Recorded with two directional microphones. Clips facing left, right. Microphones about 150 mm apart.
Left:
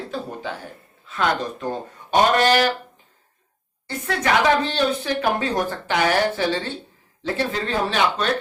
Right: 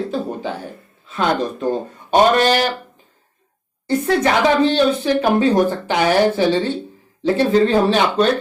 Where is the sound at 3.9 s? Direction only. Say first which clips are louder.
Right 6 dB; 30° right (ahead or behind).